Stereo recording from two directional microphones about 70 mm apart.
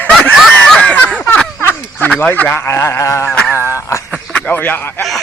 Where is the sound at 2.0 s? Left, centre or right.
Left.